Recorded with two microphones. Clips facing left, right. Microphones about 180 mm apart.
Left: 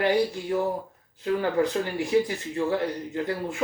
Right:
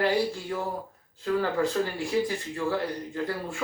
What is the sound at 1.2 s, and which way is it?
Speech, 15° left (ahead or behind).